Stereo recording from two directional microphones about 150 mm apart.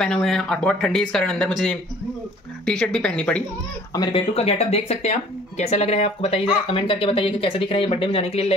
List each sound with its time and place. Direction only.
0.0 s speech: 5° left (ahead or behind)
2.6 s speech: 5° left (ahead or behind)
3.9 s speech: 35° left (ahead or behind)